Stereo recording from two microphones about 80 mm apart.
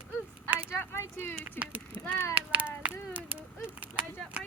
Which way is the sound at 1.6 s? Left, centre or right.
Centre.